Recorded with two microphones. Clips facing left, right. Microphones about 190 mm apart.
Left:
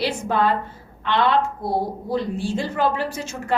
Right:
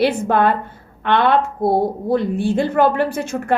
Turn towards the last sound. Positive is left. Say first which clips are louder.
# right 6 dB
turn(degrees=-60)  # may be behind; listen again after turning